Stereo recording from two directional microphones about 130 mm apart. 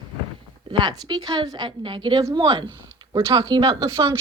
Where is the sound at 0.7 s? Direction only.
35° right (ahead or behind).